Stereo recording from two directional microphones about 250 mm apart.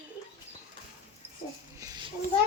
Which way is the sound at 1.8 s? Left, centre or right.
Centre.